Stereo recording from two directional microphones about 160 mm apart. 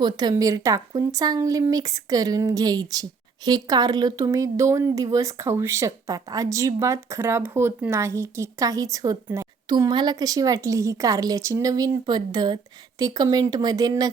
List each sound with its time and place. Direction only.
0.0 s speech: 25° right (ahead or behind)